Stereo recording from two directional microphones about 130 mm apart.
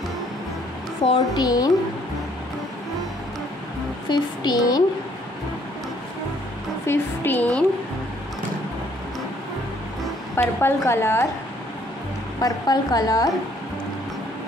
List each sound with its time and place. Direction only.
1.0 s a woman's voice: 40° left (ahead or behind)
1.4 s a woman's voice: 30° left (ahead or behind)
4.1 s a woman's voice: 35° left (ahead or behind)
6.9 s a woman's voice: 15° left (ahead or behind)
10.3 s a woman's voice: 15° left (ahead or behind)
12.4 s a woman's voice: 30° left (ahead or behind)